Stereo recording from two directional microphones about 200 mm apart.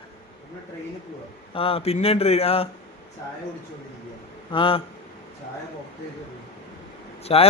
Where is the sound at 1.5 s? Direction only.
30° left (ahead or behind).